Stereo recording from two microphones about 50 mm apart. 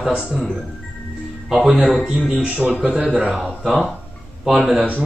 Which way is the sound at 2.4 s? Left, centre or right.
Right.